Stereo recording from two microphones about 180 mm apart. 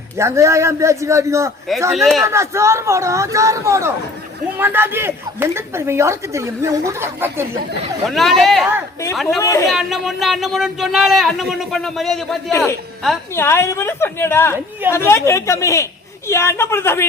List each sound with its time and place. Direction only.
0.2 s speech: 15° right (ahead or behind)
2.0 s speech: centre (ahead or behind)
2.2 s speech: 15° right (ahead or behind)
8.0 s speech: centre (ahead or behind)
9.4 s a man's voice: 15° left (ahead or behind)
9.6 s speech: centre (ahead or behind)
12.5 s a man's voice: 15° left (ahead or behind)